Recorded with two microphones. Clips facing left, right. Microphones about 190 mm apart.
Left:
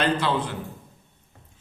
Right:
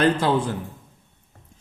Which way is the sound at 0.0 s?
45° right (ahead or behind).